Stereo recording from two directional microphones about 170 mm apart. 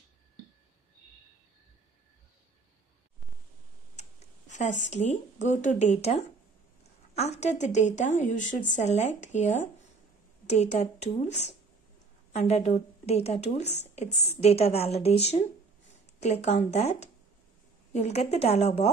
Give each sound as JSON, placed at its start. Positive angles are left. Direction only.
{"t": 4.5, "sound": "a woman's voice", "side_deg": 45}